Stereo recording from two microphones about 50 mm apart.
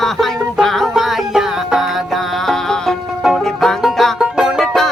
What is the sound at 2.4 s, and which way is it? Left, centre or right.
Music, centre.